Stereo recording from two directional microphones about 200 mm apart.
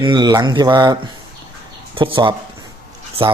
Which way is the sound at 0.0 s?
20° right (ahead or behind).